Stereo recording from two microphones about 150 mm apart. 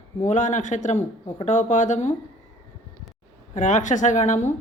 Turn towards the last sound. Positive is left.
turn(degrees=50)  # may be behind; listen again after turning